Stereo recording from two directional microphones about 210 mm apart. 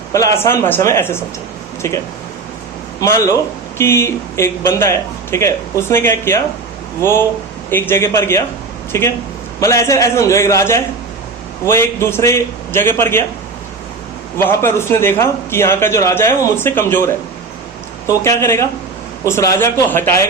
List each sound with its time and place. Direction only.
0.1 s a man's voice: 15° left (ahead or behind)
3.0 s a man's voice: 15° left (ahead or behind)
7.7 s a man's voice: 10° left (ahead or behind)
14.3 s a man's voice: 10° left (ahead or behind)
18.2 s a man's voice: 15° left (ahead or behind)